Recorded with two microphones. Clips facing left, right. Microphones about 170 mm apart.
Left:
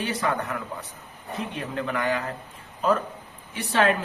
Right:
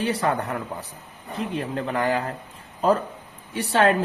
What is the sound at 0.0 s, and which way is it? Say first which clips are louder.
Speech: right 3 dB; 35° right (ahead or behind).